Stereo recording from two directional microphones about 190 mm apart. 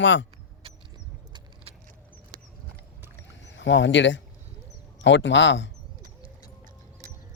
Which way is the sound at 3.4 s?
75° left (ahead or behind).